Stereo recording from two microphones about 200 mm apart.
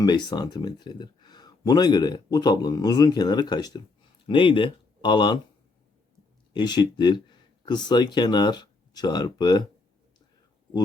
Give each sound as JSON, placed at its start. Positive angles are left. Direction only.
{"t": 0.0, "sound": "speech", "side_deg": 20}
{"t": 6.5, "sound": "speech", "side_deg": 20}